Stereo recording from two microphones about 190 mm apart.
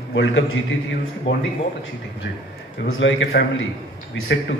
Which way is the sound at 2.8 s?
80° left.